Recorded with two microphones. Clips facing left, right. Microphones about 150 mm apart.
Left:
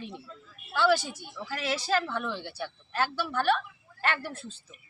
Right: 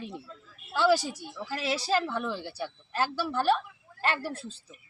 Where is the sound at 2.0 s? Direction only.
5° right (ahead or behind).